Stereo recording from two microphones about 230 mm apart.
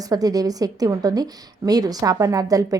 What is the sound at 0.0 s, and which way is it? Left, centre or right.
A woman's voice, centre.